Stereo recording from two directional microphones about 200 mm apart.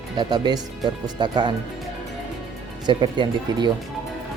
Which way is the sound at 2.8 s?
20° right (ahead or behind).